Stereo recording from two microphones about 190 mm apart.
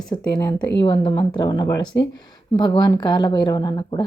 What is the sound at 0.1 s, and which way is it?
A woman's voice, 20° left (ahead or behind).